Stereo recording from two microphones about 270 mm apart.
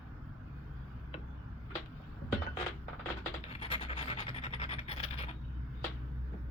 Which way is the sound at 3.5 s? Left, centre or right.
Centre.